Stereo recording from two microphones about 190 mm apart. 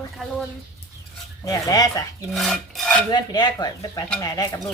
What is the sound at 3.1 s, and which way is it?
Speech, 20° left (ahead or behind).